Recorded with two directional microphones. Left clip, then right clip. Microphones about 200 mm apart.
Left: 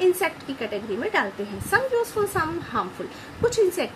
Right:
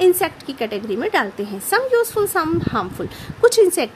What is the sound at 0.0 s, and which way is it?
A woman's voice, 55° right (ahead or behind).